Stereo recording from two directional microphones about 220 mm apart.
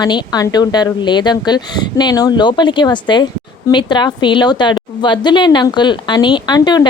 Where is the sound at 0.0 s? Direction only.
15° left (ahead or behind).